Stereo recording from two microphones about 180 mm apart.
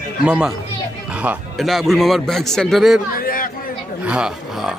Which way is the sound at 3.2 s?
50° left (ahead or behind).